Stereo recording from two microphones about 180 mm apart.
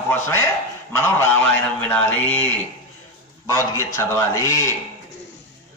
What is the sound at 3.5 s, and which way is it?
A man's voice, 15° left (ahead or behind).